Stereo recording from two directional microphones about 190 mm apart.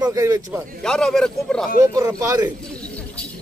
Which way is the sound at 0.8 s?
5° left (ahead or behind).